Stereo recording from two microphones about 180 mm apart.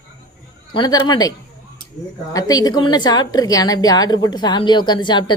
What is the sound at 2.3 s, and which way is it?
A woman's voice, 20° left (ahead or behind).